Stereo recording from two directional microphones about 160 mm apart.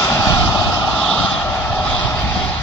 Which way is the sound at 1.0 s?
5° left (ahead or behind).